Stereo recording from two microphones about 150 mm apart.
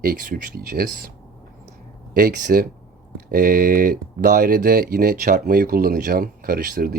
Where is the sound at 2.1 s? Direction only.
80° right.